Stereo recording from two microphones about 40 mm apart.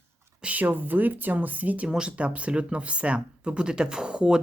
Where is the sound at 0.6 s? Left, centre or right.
Right.